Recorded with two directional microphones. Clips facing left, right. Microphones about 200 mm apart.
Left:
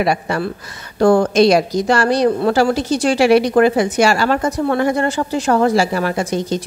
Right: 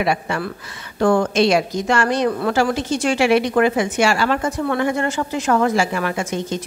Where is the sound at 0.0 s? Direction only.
40° left (ahead or behind).